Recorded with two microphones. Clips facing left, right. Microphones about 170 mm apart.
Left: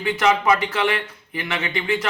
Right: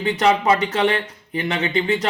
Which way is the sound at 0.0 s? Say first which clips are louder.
Right 2 dB; 30° right (ahead or behind).